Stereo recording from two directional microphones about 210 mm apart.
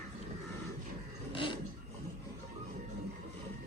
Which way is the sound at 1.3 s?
25° left (ahead or behind).